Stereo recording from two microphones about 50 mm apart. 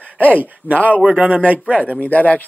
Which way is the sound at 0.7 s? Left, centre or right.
Right.